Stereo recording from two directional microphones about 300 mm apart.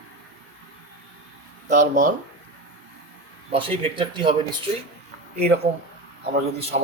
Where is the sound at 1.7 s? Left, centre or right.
Right.